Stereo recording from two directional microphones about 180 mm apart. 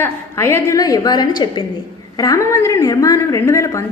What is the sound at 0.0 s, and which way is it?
A woman's voice, 15° left (ahead or behind).